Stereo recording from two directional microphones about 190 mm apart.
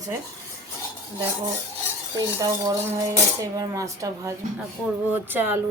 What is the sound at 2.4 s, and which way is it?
Speech, 20° right (ahead or behind).